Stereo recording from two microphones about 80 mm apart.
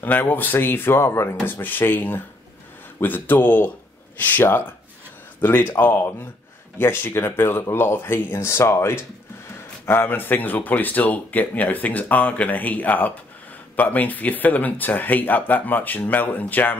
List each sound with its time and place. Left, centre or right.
0.0 s speech: left